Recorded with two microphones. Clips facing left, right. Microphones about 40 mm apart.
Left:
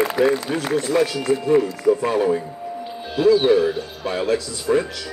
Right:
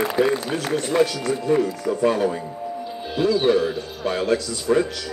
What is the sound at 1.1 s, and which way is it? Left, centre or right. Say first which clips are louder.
Speech: left 3 dB; left.